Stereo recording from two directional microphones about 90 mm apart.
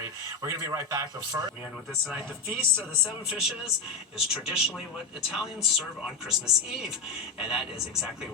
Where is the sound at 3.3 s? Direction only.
5° right (ahead or behind).